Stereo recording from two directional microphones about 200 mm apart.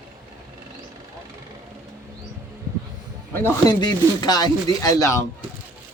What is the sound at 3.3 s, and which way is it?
Speech, 15° left (ahead or behind).